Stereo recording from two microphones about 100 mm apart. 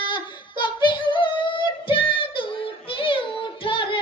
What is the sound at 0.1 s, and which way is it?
Female singing, 50° left (ahead or behind).